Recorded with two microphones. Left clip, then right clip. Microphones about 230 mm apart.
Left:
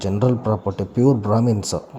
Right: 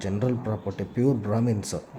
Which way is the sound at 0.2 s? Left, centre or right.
Centre.